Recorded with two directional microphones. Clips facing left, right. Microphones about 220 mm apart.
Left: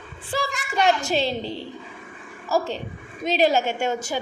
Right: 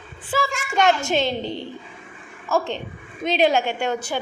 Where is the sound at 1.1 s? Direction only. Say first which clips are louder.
Right 1 dB; 35° left (ahead or behind).